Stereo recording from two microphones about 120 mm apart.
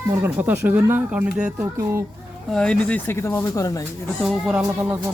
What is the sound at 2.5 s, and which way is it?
Speech, 5° left (ahead or behind).